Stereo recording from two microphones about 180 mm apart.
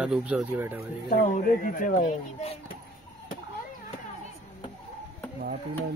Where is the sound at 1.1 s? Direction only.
50° left (ahead or behind).